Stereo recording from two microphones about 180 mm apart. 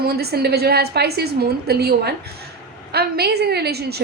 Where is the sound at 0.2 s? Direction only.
60° right (ahead or behind).